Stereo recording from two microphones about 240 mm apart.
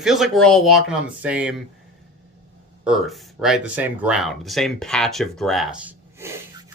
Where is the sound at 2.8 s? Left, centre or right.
Centre.